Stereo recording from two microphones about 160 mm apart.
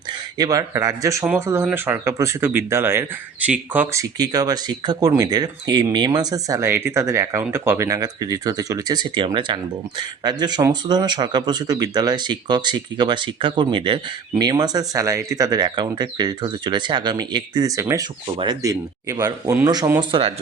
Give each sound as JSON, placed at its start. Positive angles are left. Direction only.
{"t": 0.1, "sound": "speech", "side_deg": -25}
{"t": 4.2, "sound": "speech", "side_deg": -25}
{"t": 20.1, "sound": "speech", "side_deg": -35}